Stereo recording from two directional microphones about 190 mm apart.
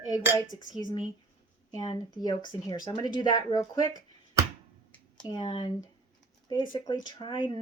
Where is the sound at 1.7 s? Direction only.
20° left (ahead or behind).